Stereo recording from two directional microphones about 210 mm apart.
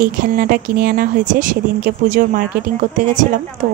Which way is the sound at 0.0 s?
40° right (ahead or behind).